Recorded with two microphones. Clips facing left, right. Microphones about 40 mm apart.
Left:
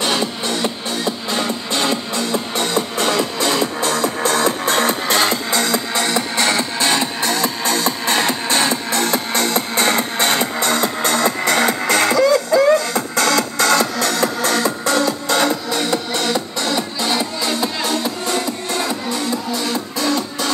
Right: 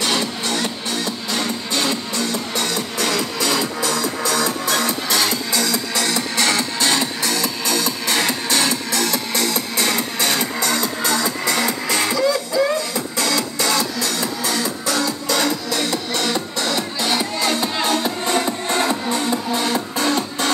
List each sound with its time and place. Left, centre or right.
0.0 s music: left
16.1 s music: centre
17.1 s music: centre
17.8 s music: right